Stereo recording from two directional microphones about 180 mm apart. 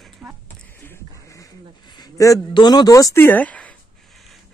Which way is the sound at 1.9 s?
20° left (ahead or behind).